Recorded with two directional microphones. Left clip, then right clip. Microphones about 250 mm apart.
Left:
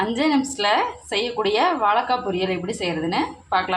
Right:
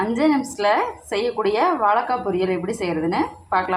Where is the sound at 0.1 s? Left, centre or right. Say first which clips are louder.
Right 1 dB; centre.